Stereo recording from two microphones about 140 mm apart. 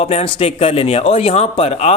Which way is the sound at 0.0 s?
45° left (ahead or behind).